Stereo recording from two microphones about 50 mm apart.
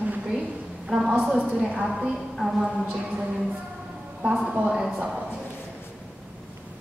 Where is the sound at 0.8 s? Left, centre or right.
Centre.